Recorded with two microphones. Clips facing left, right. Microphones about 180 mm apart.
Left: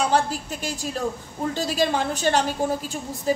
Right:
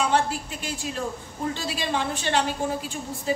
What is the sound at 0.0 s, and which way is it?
A woman's voice, 40° left (ahead or behind).